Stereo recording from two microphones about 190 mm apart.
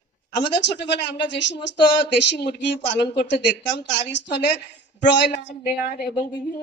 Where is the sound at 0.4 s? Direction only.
65° left (ahead or behind).